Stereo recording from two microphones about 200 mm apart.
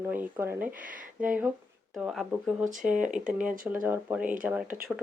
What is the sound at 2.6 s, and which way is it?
Speech, 40° right (ahead or behind).